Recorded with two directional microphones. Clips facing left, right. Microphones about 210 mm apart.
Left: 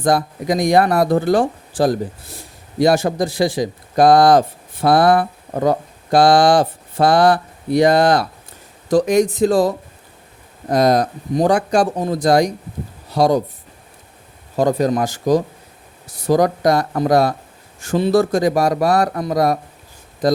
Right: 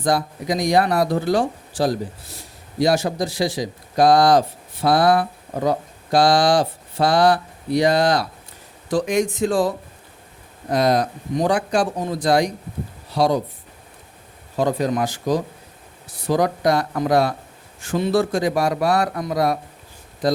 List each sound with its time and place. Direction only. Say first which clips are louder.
0.0 s a man's voice: left 4 dB; 50° left (ahead or behind)
8.9 s speech: left 5 dB; 40° left (ahead or behind)
14.5 s speech: left 4 dB; 45° left (ahead or behind)